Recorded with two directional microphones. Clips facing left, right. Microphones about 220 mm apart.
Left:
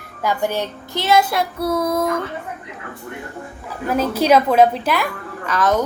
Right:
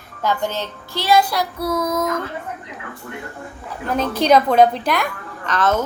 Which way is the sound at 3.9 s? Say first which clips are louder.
Even; 5° left (ahead or behind).